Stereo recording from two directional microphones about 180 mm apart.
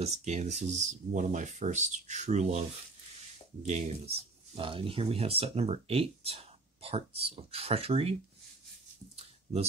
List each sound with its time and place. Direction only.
0.0 s speech: 40° right (ahead or behind)
3.6 s speech: 35° right (ahead or behind)
9.1 s a sound: 35° right (ahead or behind)